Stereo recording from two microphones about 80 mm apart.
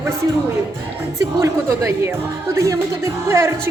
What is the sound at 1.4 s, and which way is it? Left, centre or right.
Speech, right.